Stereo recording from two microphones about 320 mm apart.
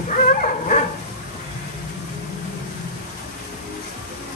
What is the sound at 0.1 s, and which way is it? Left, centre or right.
Dog, left.